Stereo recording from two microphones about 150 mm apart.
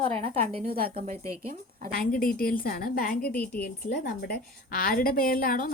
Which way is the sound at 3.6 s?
85° left.